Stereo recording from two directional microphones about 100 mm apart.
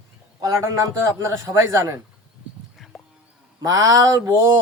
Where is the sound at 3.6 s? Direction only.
35° right (ahead or behind).